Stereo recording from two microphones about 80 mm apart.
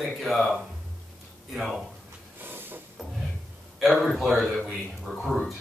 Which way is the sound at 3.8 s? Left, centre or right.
Centre.